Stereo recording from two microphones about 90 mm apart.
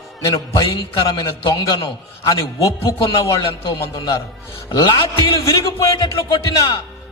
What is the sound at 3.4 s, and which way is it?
Speech, 55° left (ahead or behind).